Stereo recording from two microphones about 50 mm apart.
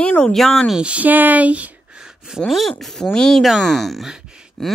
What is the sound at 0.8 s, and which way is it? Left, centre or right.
Speech, right.